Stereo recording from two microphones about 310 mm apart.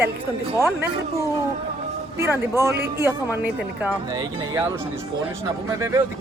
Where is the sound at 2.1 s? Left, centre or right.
Centre.